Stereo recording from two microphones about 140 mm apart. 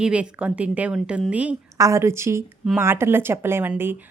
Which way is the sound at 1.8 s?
20° right (ahead or behind).